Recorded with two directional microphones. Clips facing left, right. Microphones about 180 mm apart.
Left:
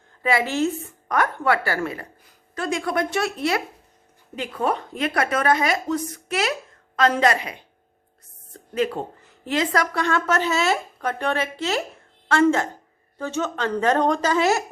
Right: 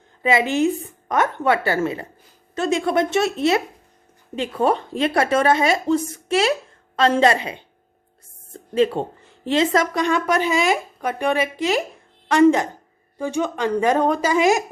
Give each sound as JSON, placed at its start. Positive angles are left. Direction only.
{"t": 0.2, "sound": "a woman's voice", "side_deg": -20}